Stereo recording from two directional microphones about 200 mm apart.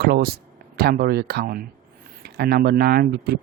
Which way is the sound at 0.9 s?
50° right (ahead or behind).